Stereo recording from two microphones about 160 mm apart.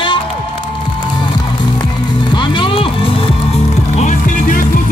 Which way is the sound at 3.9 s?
50° left (ahead or behind).